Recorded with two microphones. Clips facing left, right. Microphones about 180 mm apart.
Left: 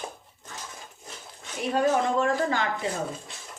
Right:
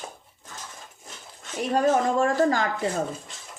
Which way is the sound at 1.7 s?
45° right (ahead or behind).